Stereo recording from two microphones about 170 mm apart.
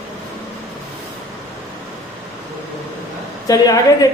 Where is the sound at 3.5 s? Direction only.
20° left (ahead or behind).